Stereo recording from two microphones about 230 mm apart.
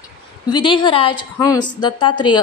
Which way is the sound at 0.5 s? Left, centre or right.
Left.